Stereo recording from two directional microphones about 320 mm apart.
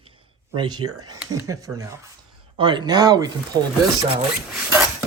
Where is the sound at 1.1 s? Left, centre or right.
Centre.